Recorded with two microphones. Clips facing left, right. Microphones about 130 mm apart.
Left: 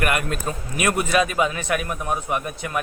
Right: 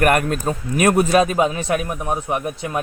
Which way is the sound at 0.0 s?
45° right (ahead or behind).